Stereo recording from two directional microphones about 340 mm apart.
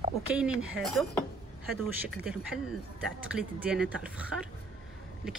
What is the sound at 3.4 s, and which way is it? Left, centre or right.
Speech, centre.